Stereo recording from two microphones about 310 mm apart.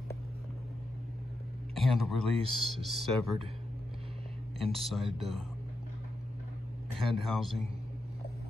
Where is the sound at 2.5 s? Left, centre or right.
Centre.